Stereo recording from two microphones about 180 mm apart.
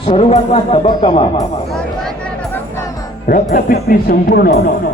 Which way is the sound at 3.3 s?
55° left (ahead or behind).